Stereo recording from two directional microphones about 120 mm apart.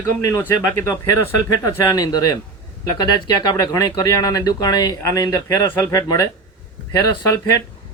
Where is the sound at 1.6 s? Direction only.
35° left (ahead or behind).